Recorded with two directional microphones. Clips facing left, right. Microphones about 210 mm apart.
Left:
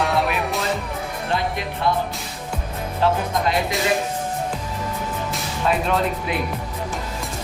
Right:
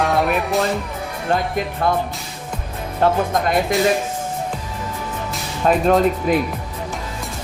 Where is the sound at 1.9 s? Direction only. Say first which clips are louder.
Right 1 dB; 50° right (ahead or behind).